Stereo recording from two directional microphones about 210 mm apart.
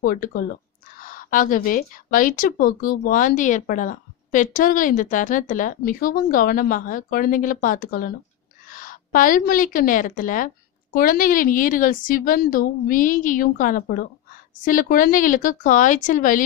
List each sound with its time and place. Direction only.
0.0 s speech: 40° left (ahead or behind)